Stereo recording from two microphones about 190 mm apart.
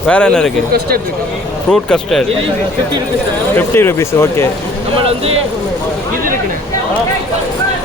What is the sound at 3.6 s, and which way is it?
Speech, 15° left (ahead or behind).